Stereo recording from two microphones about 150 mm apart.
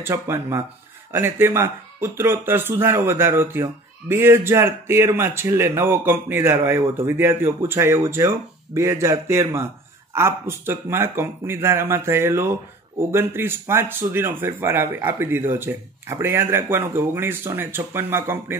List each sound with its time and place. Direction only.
0.0 s a man's voice: 15° right (ahead or behind)